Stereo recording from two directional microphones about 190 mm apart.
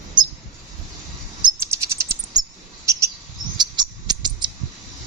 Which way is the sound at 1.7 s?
15° right (ahead or behind).